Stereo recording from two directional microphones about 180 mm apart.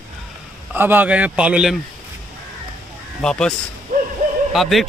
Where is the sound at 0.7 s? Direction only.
10° right (ahead or behind).